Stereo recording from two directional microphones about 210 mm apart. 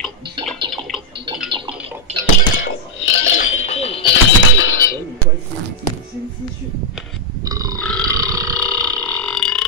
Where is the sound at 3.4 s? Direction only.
35° left (ahead or behind).